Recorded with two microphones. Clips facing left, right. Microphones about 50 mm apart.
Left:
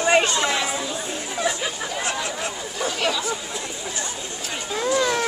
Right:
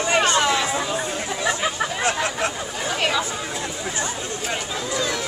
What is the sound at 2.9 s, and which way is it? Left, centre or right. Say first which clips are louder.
Chatter: right 3 dB; right.